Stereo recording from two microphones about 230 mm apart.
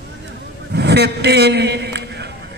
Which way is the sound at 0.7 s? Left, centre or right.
Right.